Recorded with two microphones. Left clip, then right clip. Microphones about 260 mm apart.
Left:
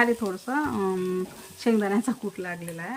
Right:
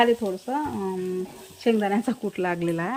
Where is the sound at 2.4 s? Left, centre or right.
Centre.